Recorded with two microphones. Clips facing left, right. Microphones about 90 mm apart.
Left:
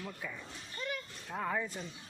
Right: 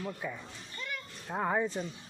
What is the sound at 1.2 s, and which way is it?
Speech, 30° right (ahead or behind).